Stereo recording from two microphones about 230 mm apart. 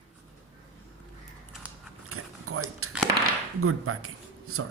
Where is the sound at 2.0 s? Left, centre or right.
Right.